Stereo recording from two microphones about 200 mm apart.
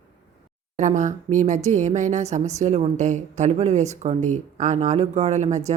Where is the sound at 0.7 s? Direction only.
40° right (ahead or behind).